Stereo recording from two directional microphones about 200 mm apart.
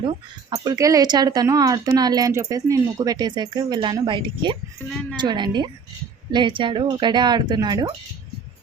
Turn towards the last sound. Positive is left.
turn(degrees=-20)  # may be behind; listen again after turning